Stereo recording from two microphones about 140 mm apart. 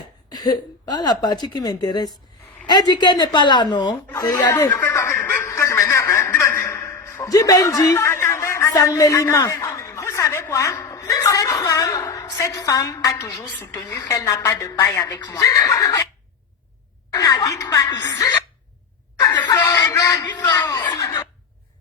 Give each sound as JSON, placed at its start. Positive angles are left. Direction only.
{"t": 0.3, "sound": "speech", "side_deg": 30}
{"t": 2.6, "sound": "chuckle", "side_deg": 30}
{"t": 13.7, "sound": "speech", "side_deg": 25}
{"t": 17.1, "sound": "speech", "side_deg": 25}
{"t": 19.2, "sound": "a sound", "side_deg": 30}